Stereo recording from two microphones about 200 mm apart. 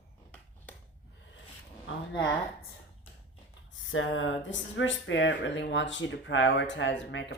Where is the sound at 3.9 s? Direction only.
75° left (ahead or behind).